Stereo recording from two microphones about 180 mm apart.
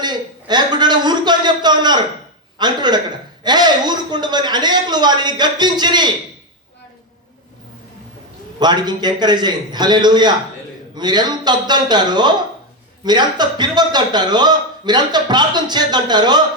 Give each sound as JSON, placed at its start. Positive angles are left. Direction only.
{"t": 0.0, "sound": "a sound", "side_deg": -25}
{"t": 2.6, "sound": "a man's voice", "side_deg": -25}
{"t": 8.5, "sound": "a man's voice", "side_deg": -25}